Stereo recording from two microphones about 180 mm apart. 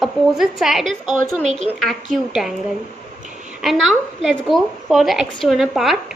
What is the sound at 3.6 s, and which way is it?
A woman's voice, centre (ahead or behind).